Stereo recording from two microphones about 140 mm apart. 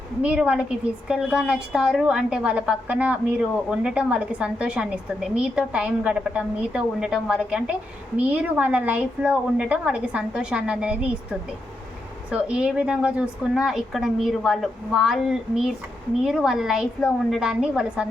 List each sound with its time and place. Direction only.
0.2 s a woman's voice: 10° right (ahead or behind)